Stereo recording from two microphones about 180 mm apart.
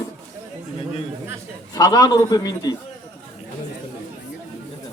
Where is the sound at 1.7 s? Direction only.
20° left (ahead or behind).